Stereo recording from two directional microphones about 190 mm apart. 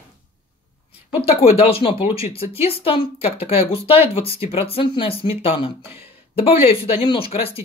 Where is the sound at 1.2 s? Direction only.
30° left (ahead or behind).